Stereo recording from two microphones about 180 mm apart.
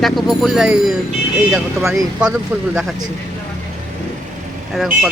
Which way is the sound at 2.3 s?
5° right (ahead or behind).